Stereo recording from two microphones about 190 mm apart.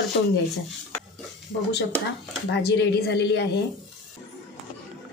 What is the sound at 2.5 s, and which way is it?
Speech, 65° left (ahead or behind).